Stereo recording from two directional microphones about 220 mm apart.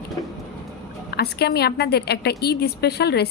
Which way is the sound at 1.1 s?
45° left (ahead or behind).